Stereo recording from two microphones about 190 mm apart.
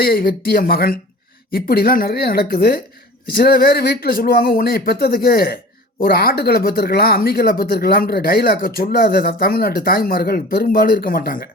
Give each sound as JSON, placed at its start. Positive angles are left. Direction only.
{"t": 0.0, "sound": "speech", "side_deg": 55}